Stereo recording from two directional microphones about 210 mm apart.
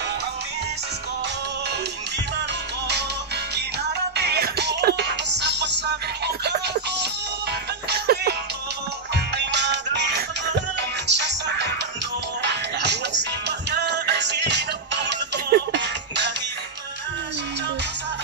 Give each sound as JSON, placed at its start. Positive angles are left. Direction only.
{"t": 4.2, "sound": "music", "side_deg": -50}